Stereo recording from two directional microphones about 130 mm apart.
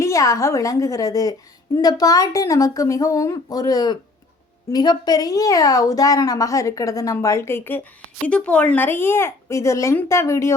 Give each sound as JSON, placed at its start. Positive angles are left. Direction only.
{"t": 0.0, "sound": "a woman's voice", "side_deg": 25}